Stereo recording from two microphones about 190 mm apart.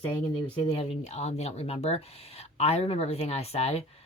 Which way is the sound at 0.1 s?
25° left (ahead or behind).